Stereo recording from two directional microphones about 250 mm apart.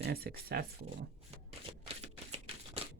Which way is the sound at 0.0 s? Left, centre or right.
Right.